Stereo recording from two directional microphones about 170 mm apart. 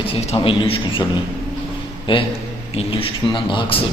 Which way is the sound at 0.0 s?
35° left (ahead or behind).